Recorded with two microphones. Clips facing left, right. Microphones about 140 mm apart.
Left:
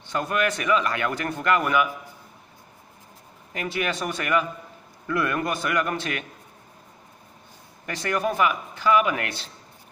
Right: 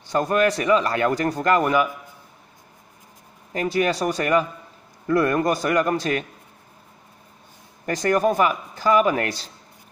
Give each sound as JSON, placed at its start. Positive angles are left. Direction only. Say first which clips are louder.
{"t": 0.0, "sound": "speech", "louder": "right 5 dB", "side_deg": -40}
{"t": 3.5, "sound": "speech", "louder": "right 6 dB", "side_deg": -35}
{"t": 7.8, "sound": "speech", "louder": "right 6 dB", "side_deg": -40}